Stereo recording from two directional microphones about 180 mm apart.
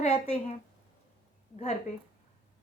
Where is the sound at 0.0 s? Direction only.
35° left (ahead or behind).